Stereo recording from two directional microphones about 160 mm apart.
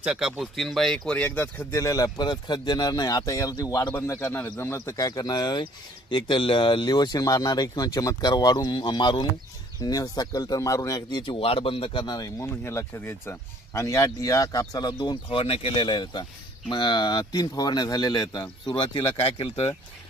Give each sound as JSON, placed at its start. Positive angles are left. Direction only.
{"t": 0.0, "sound": "speech", "side_deg": -5}